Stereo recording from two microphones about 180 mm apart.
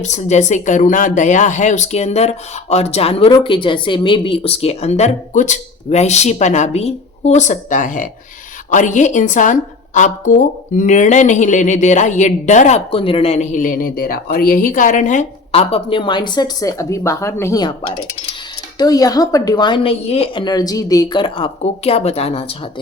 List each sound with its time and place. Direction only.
0.0 s a woman's voice: 40° left (ahead or behind); by 17.7 s 15° left (ahead or behind)
18.8 s a woman's voice: 20° left (ahead or behind)